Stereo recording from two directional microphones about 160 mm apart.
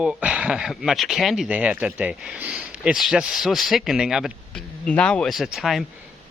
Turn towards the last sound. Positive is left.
turn(degrees=0)  # may be behind; listen again after turning